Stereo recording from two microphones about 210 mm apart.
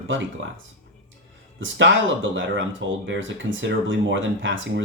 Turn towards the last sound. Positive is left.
turn(degrees=-65)  # may be behind; listen again after turning